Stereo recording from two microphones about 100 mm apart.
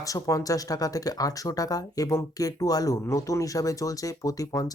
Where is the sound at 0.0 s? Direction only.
35° left (ahead or behind).